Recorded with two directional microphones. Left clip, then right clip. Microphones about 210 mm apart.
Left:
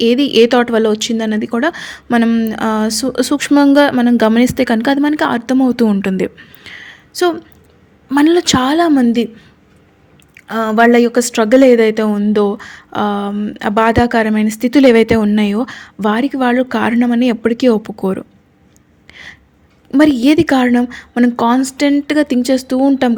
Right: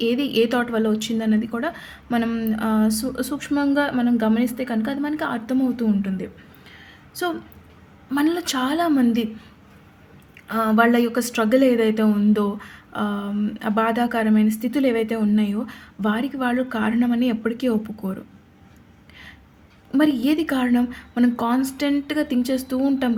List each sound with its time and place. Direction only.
0.0 s a woman's voice: 40° left (ahead or behind)
10.3 s a woman's voice: 35° left (ahead or behind)
19.1 s a sound: 40° left (ahead or behind)
19.9 s a woman's voice: 40° left (ahead or behind)